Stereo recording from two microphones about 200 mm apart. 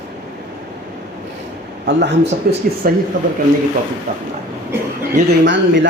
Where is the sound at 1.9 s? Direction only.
60° right (ahead or behind).